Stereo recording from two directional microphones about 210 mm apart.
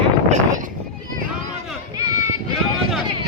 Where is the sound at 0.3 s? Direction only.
35° right (ahead or behind).